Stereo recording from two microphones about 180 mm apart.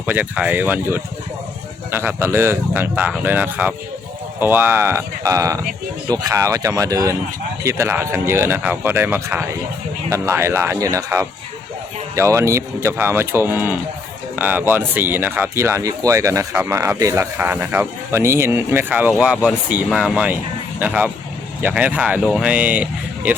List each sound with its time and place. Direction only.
0.0 s speech: 10° right (ahead or behind)